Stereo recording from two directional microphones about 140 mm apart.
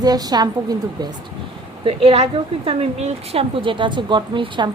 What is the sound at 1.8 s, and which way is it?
A woman's voice, 50° right (ahead or behind).